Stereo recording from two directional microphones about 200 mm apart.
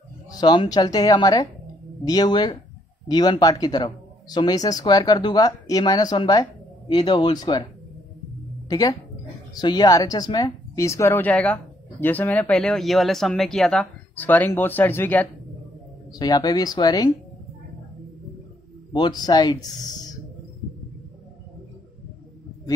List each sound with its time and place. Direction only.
0.3 s speech: 20° left (ahead or behind)
8.6 s speech: 20° left (ahead or behind)
18.9 s speech: 20° left (ahead or behind)